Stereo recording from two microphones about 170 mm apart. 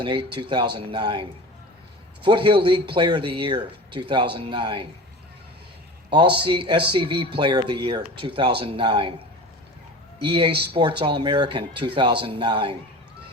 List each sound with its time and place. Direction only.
0.0 s speech: 30° right (ahead or behind)
6.1 s speech: 30° right (ahead or behind)